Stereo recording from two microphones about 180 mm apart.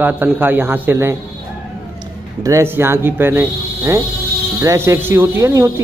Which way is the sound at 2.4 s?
15° right (ahead or behind).